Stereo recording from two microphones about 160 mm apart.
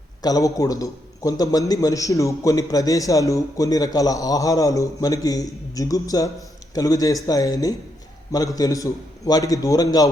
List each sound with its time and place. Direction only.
0.2 s a man's voice: 25° left (ahead or behind)